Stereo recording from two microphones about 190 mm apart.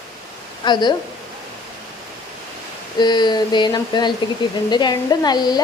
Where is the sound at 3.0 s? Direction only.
20° left (ahead or behind).